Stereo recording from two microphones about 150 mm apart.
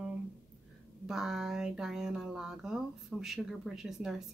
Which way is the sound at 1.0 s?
5° right (ahead or behind).